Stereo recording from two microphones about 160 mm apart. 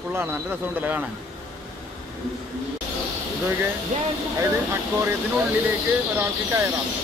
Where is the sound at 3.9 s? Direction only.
50° right (ahead or behind).